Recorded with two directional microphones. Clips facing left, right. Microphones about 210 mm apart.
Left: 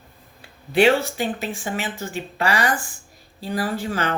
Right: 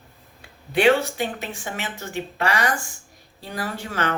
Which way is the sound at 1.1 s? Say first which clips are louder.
Left 2 dB; 30° left (ahead or behind).